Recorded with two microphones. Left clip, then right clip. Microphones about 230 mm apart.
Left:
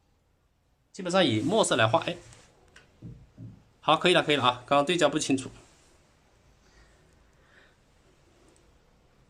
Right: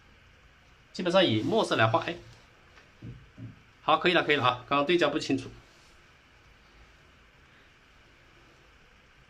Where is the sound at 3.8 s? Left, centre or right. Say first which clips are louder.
Left 2 dB; left.